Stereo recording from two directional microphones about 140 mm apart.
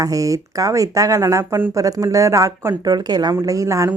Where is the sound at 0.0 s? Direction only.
25° right (ahead or behind).